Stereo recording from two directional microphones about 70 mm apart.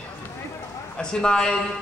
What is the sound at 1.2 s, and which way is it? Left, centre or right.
Speech, centre.